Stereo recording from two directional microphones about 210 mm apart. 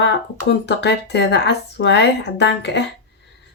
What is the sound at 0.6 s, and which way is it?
Speech, 55° left (ahead or behind).